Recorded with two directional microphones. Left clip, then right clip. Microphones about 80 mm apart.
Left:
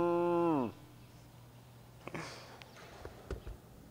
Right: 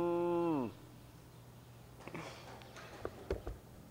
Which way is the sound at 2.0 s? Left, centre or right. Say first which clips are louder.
Left 3 dB; centre.